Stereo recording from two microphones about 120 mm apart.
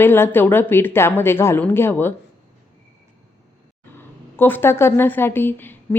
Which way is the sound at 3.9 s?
15° left (ahead or behind).